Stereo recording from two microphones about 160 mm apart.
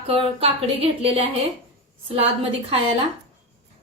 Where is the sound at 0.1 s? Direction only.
35° right (ahead or behind).